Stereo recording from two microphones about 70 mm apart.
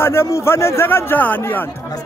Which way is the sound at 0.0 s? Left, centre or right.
Left.